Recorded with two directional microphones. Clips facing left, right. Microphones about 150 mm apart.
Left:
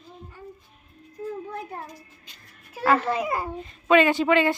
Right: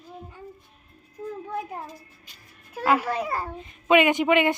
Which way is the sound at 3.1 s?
10° left (ahead or behind).